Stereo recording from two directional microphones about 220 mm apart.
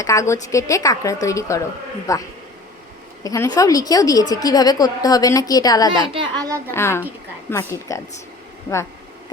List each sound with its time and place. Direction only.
0.0 s a woman's voice: 15° left (ahead or behind)
3.2 s a woman's voice: 15° left (ahead or behind)
6.2 s a child's voice: 15° right (ahead or behind)
6.7 s a woman's voice: 10° left (ahead or behind)